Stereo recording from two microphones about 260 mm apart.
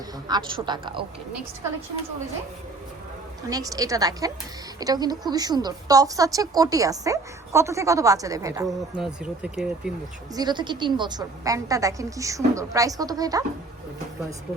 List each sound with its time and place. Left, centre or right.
0.3 s a woman's voice: centre
3.5 s a woman's voice: centre
8.6 s speech: centre
10.3 s a woman's voice: centre